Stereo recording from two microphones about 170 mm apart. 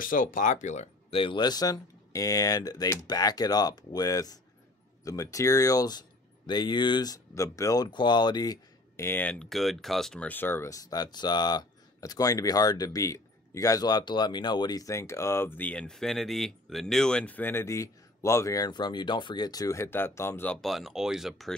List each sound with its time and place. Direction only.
0.0 s speech: 55° left (ahead or behind)
1.2 s speech: 25° left (ahead or behind)
20.6 s speech: centre (ahead or behind)